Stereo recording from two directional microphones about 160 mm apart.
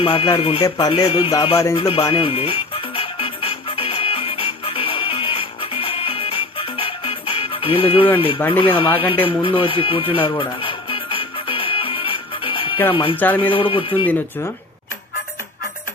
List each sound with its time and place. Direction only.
0.0 s speech: 35° left (ahead or behind)
1.8 s music: 35° left (ahead or behind)
8.4 s music: 10° left (ahead or behind)
8.6 s speech: 35° left (ahead or behind)
9.2 s music: 35° left (ahead or behind)
12.9 s speech: 35° left (ahead or behind)
13.1 s music: 10° left (ahead or behind)
13.5 s speech: 35° left (ahead or behind)